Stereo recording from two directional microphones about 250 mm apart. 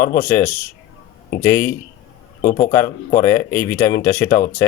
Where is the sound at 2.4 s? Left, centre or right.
Left.